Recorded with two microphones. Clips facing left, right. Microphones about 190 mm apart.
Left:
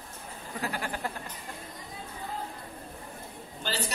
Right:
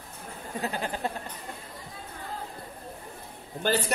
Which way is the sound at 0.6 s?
25° right (ahead or behind).